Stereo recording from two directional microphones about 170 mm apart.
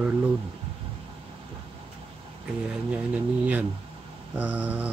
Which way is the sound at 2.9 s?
10° right (ahead or behind).